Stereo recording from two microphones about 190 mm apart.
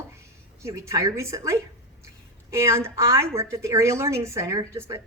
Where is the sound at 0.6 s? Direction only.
15° right (ahead or behind).